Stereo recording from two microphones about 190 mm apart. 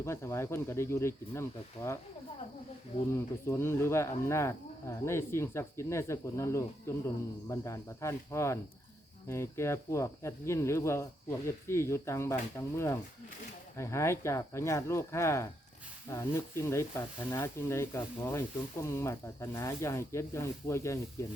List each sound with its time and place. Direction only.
0.0 s speech: 15° left (ahead or behind)
3.1 s speech: 15° left (ahead or behind)